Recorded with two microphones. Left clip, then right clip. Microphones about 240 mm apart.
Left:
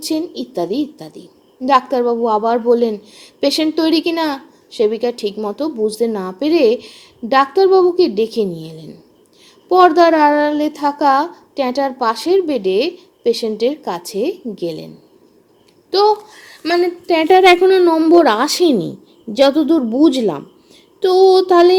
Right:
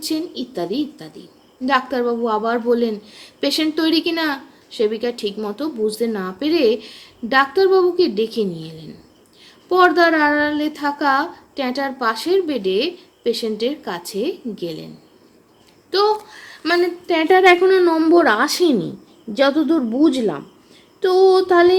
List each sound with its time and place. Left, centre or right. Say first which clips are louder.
0.0 s a woman's voice: left 3 dB; centre
15.9 s a woman's voice: left 4 dB; centre